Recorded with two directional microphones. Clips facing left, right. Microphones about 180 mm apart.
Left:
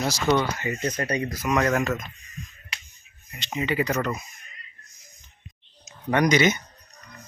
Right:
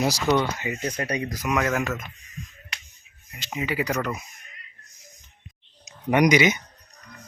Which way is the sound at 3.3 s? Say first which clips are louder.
Left 2 dB; 5° right (ahead or behind).